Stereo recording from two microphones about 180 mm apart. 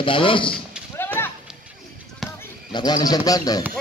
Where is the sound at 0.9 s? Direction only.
10° left (ahead or behind).